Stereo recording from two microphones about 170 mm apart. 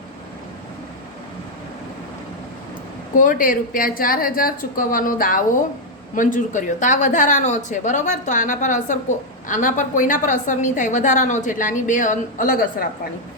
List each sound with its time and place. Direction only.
3.2 s a woman's voice: 50° left (ahead or behind)